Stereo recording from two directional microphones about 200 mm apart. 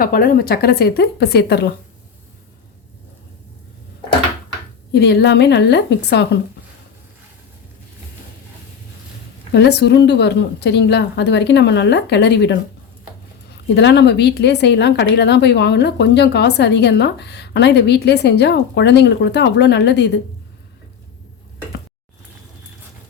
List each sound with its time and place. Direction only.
0.0 s speech: 45° left (ahead or behind)
4.9 s speech: 55° left (ahead or behind)
9.5 s speech: 55° left (ahead or behind)
13.7 s speech: 60° left (ahead or behind)